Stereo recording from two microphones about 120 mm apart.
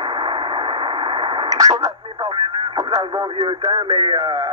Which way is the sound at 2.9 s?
30° right (ahead or behind).